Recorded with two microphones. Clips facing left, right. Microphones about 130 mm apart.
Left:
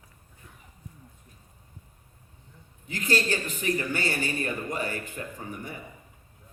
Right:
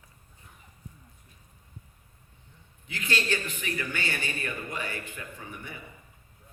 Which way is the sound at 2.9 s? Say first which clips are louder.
Left 3 dB; 40° left (ahead or behind).